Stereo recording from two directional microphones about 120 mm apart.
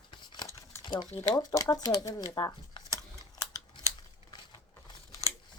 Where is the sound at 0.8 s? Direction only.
40° left (ahead or behind).